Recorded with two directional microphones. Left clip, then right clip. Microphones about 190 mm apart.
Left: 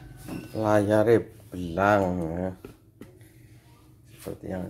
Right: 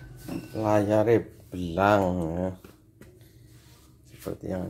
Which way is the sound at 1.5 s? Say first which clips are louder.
Even; 10° right (ahead or behind).